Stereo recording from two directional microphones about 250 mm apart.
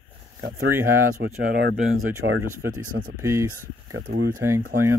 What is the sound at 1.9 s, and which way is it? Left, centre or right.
Speech, right.